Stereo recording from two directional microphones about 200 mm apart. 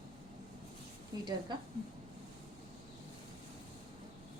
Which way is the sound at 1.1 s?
20° right (ahead or behind).